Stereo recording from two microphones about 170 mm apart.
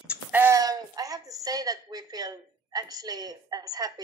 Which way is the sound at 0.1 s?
10° right (ahead or behind).